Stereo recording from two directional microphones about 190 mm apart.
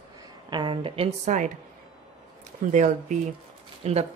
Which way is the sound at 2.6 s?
40° right (ahead or behind).